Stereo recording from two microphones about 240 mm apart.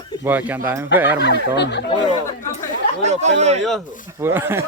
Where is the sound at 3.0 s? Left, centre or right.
Right.